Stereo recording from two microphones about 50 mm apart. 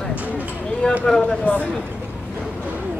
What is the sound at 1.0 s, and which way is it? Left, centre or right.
Speech, centre.